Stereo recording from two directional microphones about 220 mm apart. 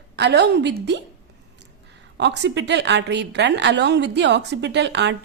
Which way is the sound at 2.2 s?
50° right (ahead or behind).